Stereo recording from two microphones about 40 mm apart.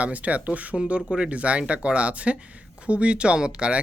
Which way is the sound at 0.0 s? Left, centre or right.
Right.